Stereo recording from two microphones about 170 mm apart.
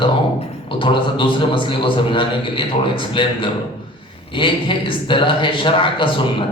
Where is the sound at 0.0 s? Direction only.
30° left (ahead or behind).